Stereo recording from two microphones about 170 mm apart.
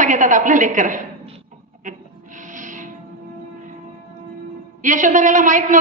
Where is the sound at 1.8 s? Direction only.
50° right (ahead or behind).